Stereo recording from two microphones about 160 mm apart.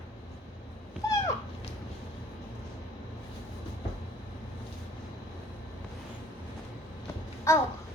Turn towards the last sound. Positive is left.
turn(degrees=15)  # may be behind; listen again after turning